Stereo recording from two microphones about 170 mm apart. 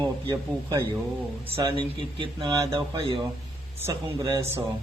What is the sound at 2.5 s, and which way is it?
Speech, 20° right (ahead or behind).